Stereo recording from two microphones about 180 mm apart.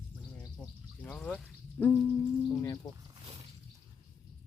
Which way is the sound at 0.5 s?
5° left (ahead or behind).